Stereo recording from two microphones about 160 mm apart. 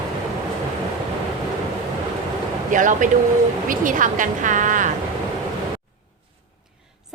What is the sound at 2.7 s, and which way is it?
Speech, 55° right (ahead or behind).